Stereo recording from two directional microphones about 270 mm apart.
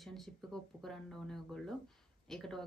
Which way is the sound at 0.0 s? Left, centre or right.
Centre.